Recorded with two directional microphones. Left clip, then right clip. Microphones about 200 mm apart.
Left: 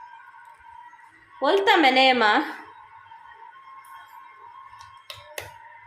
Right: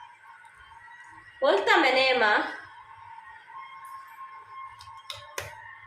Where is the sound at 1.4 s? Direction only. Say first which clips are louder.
Left 3 dB; 60° left (ahead or behind).